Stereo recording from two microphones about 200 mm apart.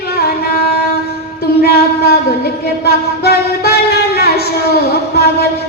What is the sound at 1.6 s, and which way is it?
Music, 50° left (ahead or behind).